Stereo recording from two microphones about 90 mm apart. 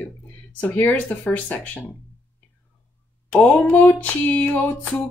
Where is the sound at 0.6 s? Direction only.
20° left (ahead or behind).